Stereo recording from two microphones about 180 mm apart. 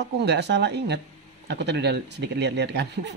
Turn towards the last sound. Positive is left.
turn(degrees=-70)  # may be behind; listen again after turning